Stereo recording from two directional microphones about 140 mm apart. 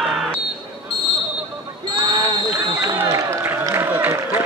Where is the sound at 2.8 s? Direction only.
20° right (ahead or behind).